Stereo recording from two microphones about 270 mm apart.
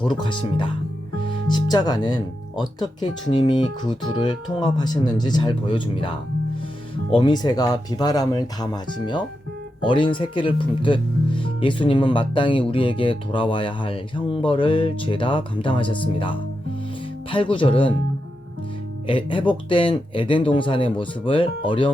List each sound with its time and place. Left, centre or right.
0.0 s speech: centre
19.0 s speech: centre